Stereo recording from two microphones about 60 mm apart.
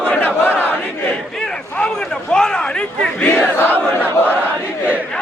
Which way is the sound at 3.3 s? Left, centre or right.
Left.